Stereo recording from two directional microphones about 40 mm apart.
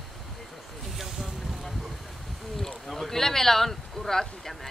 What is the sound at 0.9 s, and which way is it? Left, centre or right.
Boat, centre.